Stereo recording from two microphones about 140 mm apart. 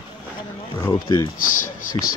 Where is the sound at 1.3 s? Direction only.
75° left (ahead or behind).